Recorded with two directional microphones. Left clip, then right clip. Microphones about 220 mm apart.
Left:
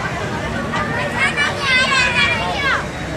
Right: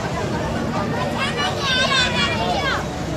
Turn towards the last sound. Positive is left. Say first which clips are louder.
# left 4 dB
turn(degrees=15)  # may be behind; listen again after turning